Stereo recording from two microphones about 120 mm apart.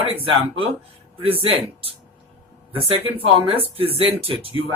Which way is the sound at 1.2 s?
50° right (ahead or behind).